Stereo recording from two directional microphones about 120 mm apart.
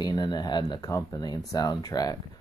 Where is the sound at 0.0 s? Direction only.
35° left (ahead or behind).